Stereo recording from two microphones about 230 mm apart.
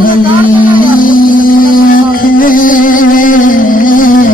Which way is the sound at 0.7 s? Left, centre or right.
Left.